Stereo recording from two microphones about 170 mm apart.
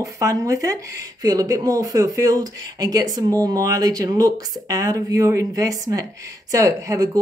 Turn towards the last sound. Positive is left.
turn(degrees=-20)  # may be behind; listen again after turning